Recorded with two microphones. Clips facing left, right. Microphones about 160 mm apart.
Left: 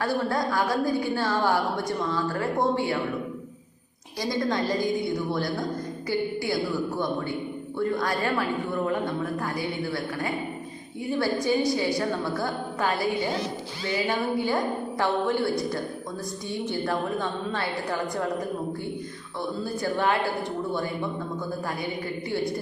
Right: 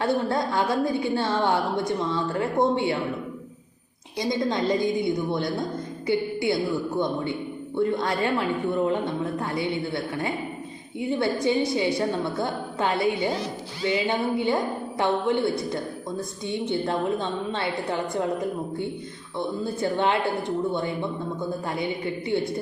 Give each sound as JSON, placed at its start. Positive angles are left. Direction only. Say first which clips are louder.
{"t": 0.0, "sound": "a woman's voice", "louder": "right 2 dB", "side_deg": -25}
{"t": 4.2, "sound": "a woman's voice", "louder": "right 2 dB", "side_deg": -20}
{"t": 19.4, "sound": "a woman's voice", "louder": "right 3 dB", "side_deg": -25}
{"t": 21.8, "sound": "a woman's voice", "louder": "right 3 dB", "side_deg": -25}